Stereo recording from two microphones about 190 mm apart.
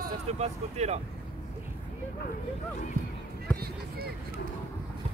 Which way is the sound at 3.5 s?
55° right (ahead or behind).